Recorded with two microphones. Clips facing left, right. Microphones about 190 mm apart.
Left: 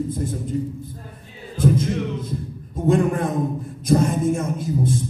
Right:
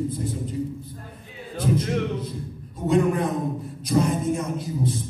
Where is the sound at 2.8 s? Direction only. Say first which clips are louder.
Left 6 dB; 50° left (ahead or behind).